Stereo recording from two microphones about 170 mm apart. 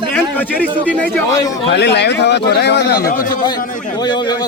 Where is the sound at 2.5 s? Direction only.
75° left (ahead or behind); by 3.4 s 55° left (ahead or behind).